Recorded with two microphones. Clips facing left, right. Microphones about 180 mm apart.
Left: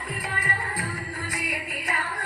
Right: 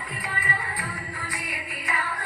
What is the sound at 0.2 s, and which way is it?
Music, 40° left (ahead or behind).